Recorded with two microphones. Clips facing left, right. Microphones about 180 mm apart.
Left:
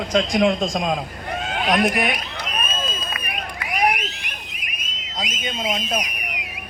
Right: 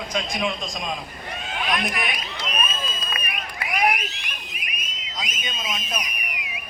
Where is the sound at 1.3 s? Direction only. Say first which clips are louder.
Left 5 dB; 50° left (ahead or behind).